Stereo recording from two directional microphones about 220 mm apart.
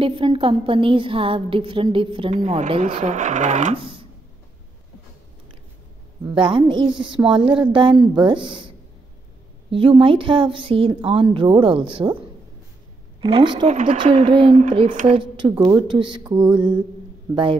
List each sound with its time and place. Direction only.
0.0 s a woman's voice: 25° right (ahead or behind)
6.2 s a woman's voice: 20° right (ahead or behind)
13.2 s a woman's voice: 25° right (ahead or behind)